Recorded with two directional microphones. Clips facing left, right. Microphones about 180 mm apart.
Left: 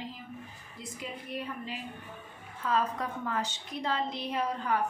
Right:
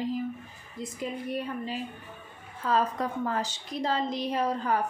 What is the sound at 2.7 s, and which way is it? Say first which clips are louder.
A woman's voice: right 3 dB; 35° right (ahead or behind).